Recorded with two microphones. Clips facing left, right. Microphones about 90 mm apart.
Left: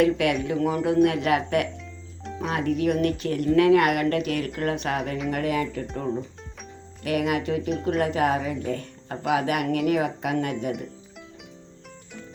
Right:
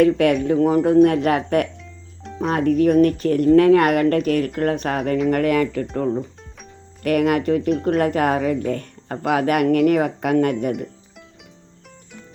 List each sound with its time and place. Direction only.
0.0 s speech: 40° right (ahead or behind)
1.8 s music: centre (ahead or behind)
2.5 s speech: 45° right (ahead or behind)
5.3 s speech: 60° right (ahead or behind)